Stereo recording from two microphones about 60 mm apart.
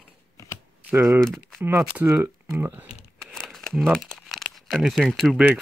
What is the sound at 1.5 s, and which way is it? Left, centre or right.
Speech, right.